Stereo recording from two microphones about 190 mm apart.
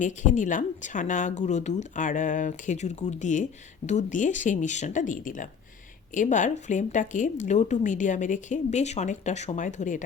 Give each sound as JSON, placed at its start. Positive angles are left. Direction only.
{"t": 0.0, "sound": "a woman's voice", "side_deg": 40}